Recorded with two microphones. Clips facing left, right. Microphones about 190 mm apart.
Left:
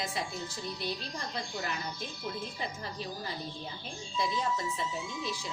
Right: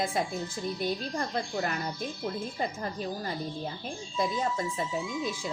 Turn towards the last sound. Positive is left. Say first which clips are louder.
# right 5 dB
turn(degrees=-50)  # may be behind; listen again after turning